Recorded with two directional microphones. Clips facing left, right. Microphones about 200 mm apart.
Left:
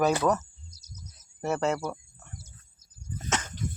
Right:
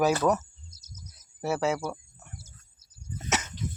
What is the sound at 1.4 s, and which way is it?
Speech, 5° right (ahead or behind).